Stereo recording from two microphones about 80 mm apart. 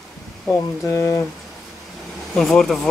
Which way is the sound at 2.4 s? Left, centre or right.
Centre.